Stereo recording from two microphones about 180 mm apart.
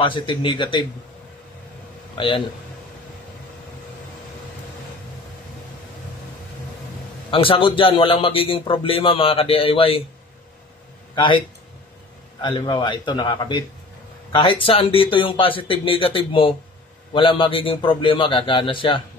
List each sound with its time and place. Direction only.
0.0 s speech: 25° left (ahead or behind)
2.1 s a man's voice: 30° left (ahead or behind)
7.2 s a man's voice: 30° left (ahead or behind)
11.1 s speech: 25° left (ahead or behind)